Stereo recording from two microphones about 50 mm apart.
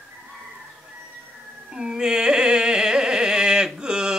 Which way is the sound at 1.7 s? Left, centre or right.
Centre.